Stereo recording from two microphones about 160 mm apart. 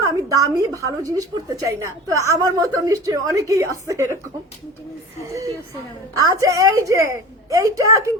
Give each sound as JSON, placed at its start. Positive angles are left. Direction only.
{"t": 0.0, "sound": "a sound", "side_deg": -20}
{"t": 0.9, "sound": "a woman's voice", "side_deg": -20}
{"t": 6.1, "sound": "a woman's voice", "side_deg": -20}